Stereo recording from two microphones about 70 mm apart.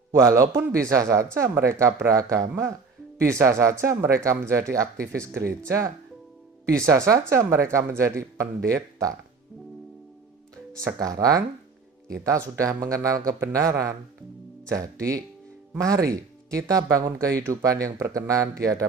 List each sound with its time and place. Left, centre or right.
0.1 s speech: right
10.8 s speech: right